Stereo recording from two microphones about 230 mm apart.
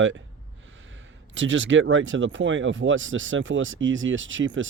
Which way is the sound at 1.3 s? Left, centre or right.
Right.